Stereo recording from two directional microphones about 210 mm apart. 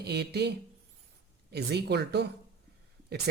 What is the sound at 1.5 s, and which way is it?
Speech, 50° right (ahead or behind).